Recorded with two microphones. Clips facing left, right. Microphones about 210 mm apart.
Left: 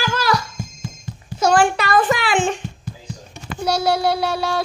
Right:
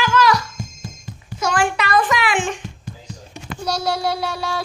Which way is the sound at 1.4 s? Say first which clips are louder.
Left 4 dB; 30° left (ahead or behind).